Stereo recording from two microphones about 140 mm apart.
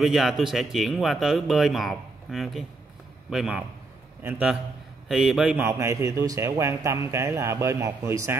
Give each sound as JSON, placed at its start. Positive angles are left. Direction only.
{"t": 0.0, "sound": "speech", "side_deg": 0}
{"t": 4.2, "sound": "a man's voice", "side_deg": -15}
{"t": 5.0, "sound": "speech", "side_deg": 0}
{"t": 5.6, "sound": "speech", "side_deg": -20}